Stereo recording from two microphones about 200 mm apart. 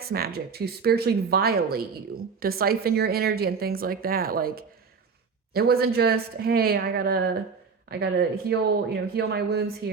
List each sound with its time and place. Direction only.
0.0 s speech: 50° right (ahead or behind)